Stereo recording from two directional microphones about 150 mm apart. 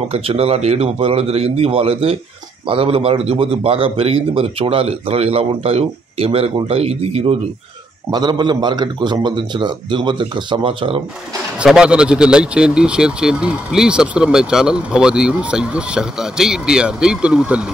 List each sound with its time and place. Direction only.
0.1 s a man's voice: 40° right (ahead or behind)
8.1 s a man's voice: 30° right (ahead or behind)
11.5 s speech: 5° right (ahead or behind)